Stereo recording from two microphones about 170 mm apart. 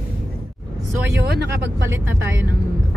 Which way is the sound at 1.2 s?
75° right (ahead or behind).